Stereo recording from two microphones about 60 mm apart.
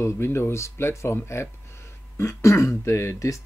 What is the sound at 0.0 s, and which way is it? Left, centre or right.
Speech, left.